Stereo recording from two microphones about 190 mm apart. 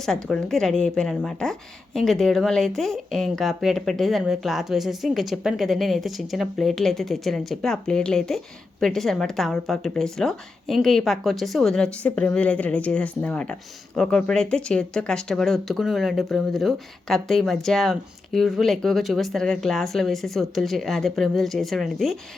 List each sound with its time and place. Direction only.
0.0 s a woman's voice: centre (ahead or behind)